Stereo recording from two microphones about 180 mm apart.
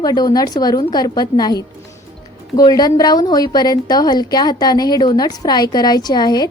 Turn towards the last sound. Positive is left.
turn(degrees=20)  # may be behind; listen again after turning